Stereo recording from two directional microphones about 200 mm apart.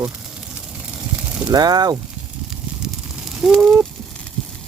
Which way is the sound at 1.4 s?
20° right (ahead or behind).